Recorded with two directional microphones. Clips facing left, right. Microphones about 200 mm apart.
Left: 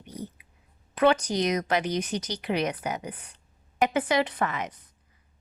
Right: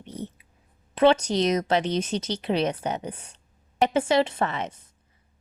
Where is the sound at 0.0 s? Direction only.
25° right (ahead or behind).